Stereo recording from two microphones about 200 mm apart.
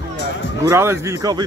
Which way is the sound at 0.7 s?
15° right (ahead or behind).